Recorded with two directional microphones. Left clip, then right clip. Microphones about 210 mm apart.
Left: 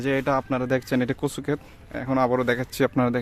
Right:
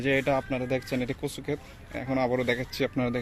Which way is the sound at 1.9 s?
30° left (ahead or behind).